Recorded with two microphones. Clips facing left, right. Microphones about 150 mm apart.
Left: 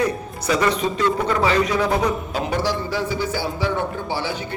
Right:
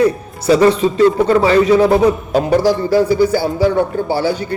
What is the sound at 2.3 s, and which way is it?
A man's voice, 40° right (ahead or behind).